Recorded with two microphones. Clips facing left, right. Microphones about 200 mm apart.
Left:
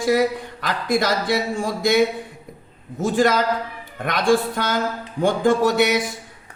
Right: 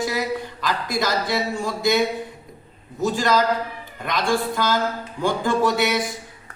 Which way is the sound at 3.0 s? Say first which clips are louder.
Left 2 dB; 50° left (ahead or behind).